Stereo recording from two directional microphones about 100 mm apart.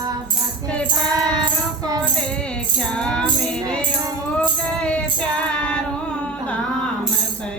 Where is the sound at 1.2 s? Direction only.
40° right (ahead or behind).